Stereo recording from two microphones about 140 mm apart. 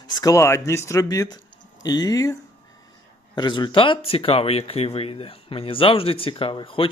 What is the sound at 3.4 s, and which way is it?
Speech, 35° left (ahead or behind).